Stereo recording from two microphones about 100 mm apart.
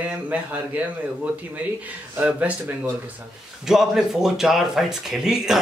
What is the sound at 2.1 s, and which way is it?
Speech, 15° right (ahead or behind).